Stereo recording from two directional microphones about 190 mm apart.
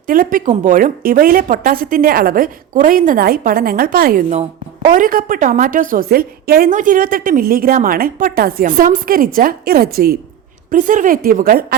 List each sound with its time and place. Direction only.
0.1 s a woman's voice: 45° right (ahead or behind)
4.3 s a woman's voice: 40° right (ahead or behind)